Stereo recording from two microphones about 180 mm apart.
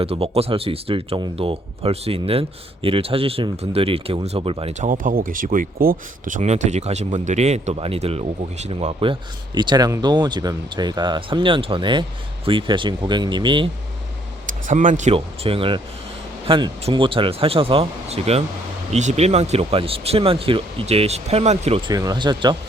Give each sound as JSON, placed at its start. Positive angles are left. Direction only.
{"t": 0.0, "sound": "speech", "side_deg": -35}
{"t": 14.4, "sound": "speech", "side_deg": -45}
{"t": 21.8, "sound": "speech", "side_deg": -20}